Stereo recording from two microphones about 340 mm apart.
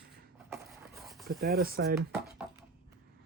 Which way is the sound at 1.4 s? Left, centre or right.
Right.